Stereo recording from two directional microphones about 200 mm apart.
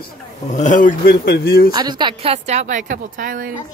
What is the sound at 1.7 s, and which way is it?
A woman's voice, 20° right (ahead or behind).